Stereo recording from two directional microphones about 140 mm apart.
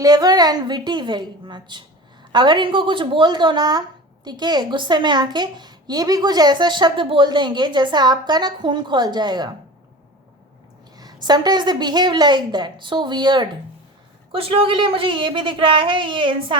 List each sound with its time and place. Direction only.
0.0 s speech: 25° right (ahead or behind)
10.9 s speech: 30° right (ahead or behind)